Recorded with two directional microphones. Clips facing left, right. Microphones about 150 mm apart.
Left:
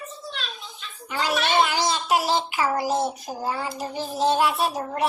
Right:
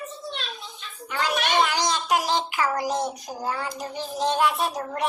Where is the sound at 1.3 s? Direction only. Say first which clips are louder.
Left 2 dB; 15° right (ahead or behind).